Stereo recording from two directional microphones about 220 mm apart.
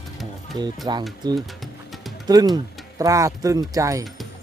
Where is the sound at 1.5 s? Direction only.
Centre (ahead or behind).